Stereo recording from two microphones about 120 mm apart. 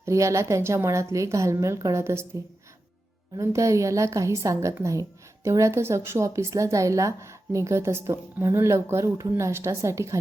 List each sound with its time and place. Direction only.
0.0 s a woman's voice: 25° right (ahead or behind)
3.3 s a woman's voice: 25° right (ahead or behind)